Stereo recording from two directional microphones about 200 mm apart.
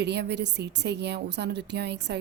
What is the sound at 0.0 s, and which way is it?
A woman's voice, 55° right (ahead or behind).